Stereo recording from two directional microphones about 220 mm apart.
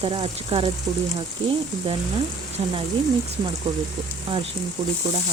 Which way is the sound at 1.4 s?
60° right (ahead or behind).